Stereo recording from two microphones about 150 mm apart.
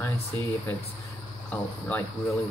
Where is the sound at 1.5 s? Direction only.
10° left (ahead or behind).